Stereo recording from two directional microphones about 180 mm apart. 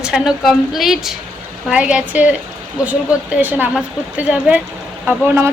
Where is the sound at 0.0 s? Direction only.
Centre (ahead or behind).